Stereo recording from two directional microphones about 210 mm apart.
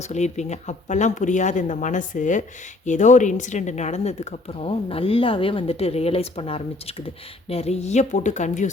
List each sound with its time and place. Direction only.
0.1 s a woman's voice: 35° left (ahead or behind)